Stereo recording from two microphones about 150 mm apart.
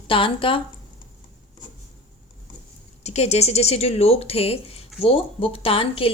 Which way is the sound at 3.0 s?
45° left (ahead or behind).